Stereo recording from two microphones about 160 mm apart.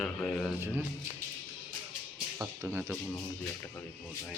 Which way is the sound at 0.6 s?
15° right (ahead or behind).